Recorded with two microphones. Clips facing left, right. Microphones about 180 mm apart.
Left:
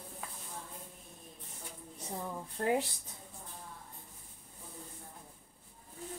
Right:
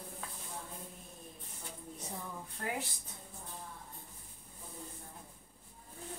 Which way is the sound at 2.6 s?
35° left (ahead or behind).